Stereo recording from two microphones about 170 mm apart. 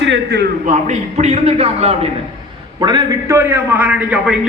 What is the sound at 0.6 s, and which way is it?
A man's voice, 40° right (ahead or behind).